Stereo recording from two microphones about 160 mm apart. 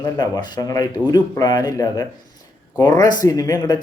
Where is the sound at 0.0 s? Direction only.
25° left (ahead or behind).